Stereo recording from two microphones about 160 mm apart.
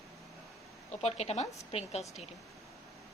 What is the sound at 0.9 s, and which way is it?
Speech, 40° left (ahead or behind).